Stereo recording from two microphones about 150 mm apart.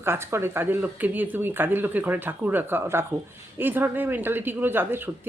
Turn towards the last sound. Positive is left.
turn(degrees=-15)  # may be behind; listen again after turning